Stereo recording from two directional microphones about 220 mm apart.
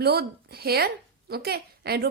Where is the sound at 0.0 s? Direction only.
45° right (ahead or behind).